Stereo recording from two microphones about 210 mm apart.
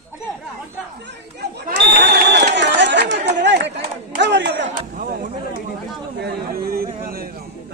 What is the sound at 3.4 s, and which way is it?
Run, 55° right (ahead or behind).